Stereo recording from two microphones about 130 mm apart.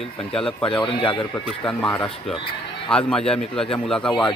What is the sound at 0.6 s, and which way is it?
Speech, 40° left (ahead or behind).